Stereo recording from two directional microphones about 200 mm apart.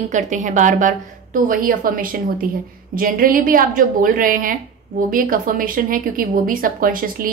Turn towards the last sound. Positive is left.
turn(degrees=-45)  # may be behind; listen again after turning